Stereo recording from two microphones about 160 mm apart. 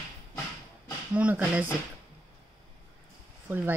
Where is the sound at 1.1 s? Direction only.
10° right (ahead or behind).